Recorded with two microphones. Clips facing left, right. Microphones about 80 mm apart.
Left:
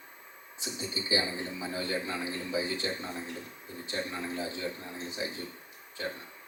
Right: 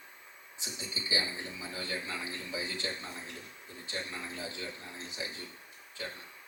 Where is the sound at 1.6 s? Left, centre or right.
Left.